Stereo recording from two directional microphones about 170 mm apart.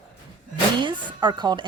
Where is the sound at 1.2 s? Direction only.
25° right (ahead or behind).